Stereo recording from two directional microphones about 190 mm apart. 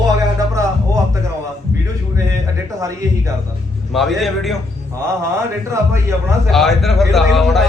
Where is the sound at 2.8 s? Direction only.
15° right (ahead or behind).